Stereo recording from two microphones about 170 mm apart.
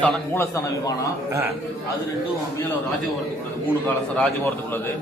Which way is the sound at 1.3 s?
15° right (ahead or behind).